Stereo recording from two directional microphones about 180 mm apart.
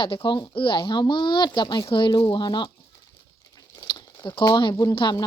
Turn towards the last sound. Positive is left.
turn(degrees=25)  # may be behind; listen again after turning